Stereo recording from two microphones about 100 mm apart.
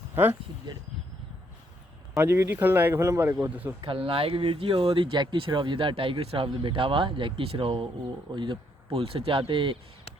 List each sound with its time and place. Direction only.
2.1 s speech: 25° right (ahead or behind)
3.8 s speech: 65° right (ahead or behind)
5.1 s speech: 50° right (ahead or behind)